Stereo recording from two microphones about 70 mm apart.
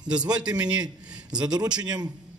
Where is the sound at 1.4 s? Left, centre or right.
Right.